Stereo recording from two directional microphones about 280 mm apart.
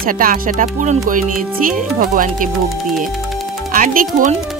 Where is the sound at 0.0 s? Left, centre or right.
Right.